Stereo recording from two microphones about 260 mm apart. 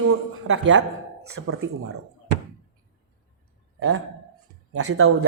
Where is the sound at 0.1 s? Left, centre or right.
Right.